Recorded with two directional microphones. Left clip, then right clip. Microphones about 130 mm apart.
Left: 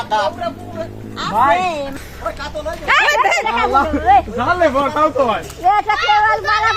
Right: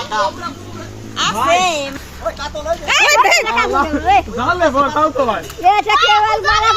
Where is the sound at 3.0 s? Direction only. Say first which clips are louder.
Right 3 dB; 90° right.